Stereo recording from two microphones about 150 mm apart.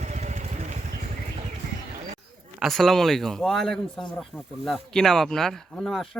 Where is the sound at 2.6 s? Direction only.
Centre (ahead or behind).